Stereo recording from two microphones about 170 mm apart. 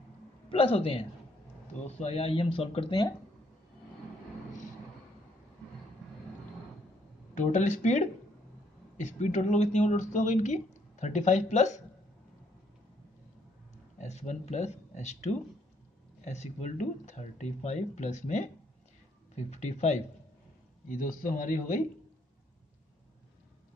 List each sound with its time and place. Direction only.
0.5 s speech: 35° left (ahead or behind)
7.3 s speech: 45° left (ahead or behind)
13.9 s speech: 40° left (ahead or behind)